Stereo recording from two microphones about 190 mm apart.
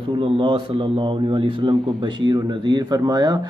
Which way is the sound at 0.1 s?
25° right (ahead or behind).